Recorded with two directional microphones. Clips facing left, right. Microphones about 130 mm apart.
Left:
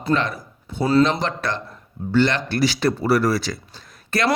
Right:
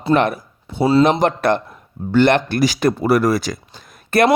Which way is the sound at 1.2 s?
55° right (ahead or behind).